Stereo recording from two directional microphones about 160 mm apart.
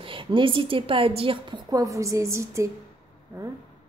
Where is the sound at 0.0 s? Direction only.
35° right (ahead or behind).